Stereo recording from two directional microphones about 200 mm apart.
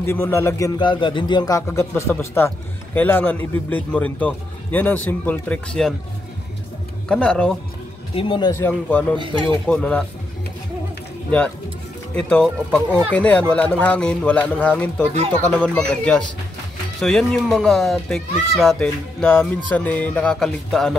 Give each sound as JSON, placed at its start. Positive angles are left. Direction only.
{"t": 0.0, "sound": "a man's voice", "side_deg": 10}
{"t": 7.1, "sound": "speech", "side_deg": 5}
{"t": 8.1, "sound": "speech", "side_deg": 25}
{"t": 8.5, "sound": "a man's voice", "side_deg": 10}
{"t": 12.2, "sound": "a man's voice", "side_deg": 5}